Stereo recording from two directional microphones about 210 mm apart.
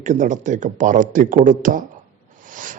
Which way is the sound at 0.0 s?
35° right (ahead or behind).